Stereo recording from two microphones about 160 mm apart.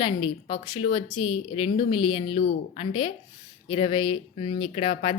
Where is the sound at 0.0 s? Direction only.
35° left (ahead or behind).